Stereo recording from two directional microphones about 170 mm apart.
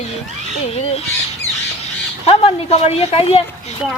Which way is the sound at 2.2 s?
40° left (ahead or behind).